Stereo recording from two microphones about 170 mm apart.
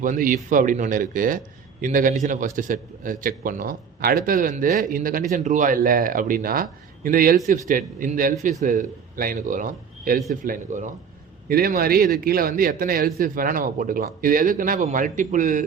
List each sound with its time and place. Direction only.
0.0 s a man's voice: 50° right (ahead or behind)
11.4 s a man's voice: 60° right (ahead or behind)